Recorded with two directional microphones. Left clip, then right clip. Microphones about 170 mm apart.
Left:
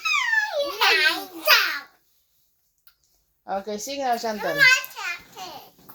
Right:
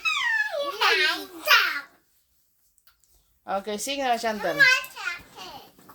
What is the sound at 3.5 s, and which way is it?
Speech, 30° right (ahead or behind).